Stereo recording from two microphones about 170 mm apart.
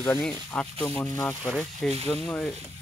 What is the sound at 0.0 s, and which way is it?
Speech, 15° left (ahead or behind).